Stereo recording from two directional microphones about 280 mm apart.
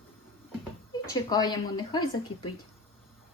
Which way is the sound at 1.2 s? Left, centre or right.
Centre.